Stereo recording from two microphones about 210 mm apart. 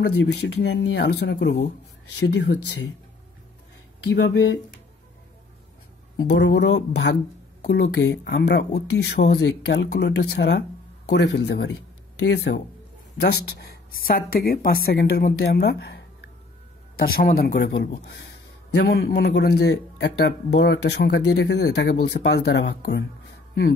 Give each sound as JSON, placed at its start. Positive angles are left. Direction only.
{"t": 0.0, "sound": "speech", "side_deg": 55}
{"t": 4.1, "sound": "speech", "side_deg": 55}
{"t": 6.2, "sound": "speech", "side_deg": 55}
{"t": 17.2, "sound": "speech", "side_deg": 45}